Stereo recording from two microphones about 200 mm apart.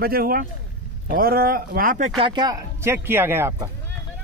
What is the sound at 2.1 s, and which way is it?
Speech, 25° right (ahead or behind).